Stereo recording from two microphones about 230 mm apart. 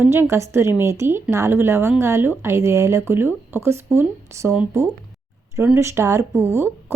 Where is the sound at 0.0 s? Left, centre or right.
Centre.